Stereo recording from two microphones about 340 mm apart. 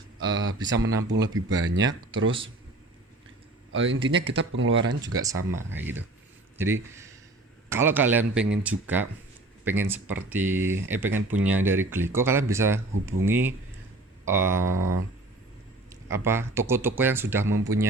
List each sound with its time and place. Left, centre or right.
0.3 s speech: right
0.8 s speech: centre
1.7 s speech: right
3.7 s speech: right
4.9 s speech: centre
14.8 s a sound: right
16.0 s speech: centre